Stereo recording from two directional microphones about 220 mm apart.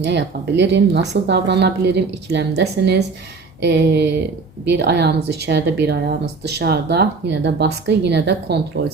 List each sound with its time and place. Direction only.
0.0 s speech: 50° right (ahead or behind)